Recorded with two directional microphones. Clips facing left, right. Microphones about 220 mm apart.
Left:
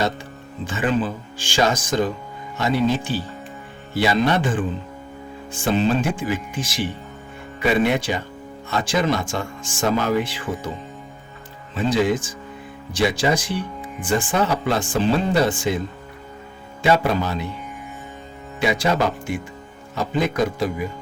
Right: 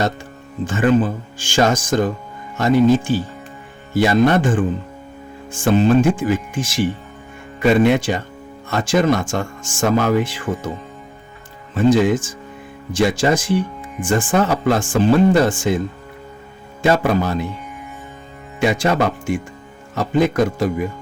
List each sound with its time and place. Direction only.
0.6 s speech: 50° right (ahead or behind)
11.7 s speech: 45° right (ahead or behind)
16.8 s speech: 50° right (ahead or behind)
18.7 s speech: 50° right (ahead or behind)
20.3 s speech: 45° right (ahead or behind)